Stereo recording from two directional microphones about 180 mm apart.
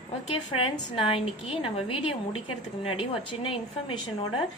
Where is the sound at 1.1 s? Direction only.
35° left (ahead or behind).